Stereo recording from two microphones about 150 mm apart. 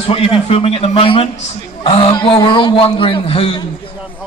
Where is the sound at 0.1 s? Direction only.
40° left (ahead or behind).